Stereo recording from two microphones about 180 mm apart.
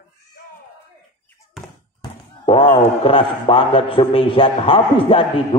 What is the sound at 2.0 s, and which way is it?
Speech, 30° left (ahead or behind).